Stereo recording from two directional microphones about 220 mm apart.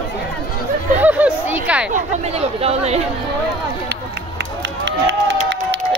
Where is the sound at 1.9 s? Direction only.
30° right (ahead or behind).